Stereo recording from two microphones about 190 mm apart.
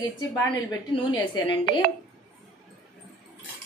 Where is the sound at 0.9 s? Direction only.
25° left (ahead or behind).